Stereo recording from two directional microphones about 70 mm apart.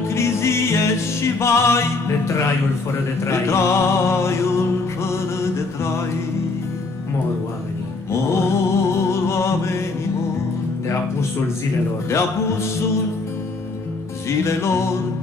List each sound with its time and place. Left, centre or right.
0.1 s music: left
8.1 s mantra: left
14.4 s music: left